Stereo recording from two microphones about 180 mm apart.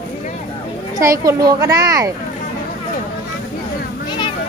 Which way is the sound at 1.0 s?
20° right (ahead or behind).